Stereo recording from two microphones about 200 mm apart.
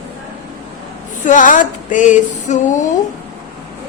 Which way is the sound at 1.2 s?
40° left (ahead or behind).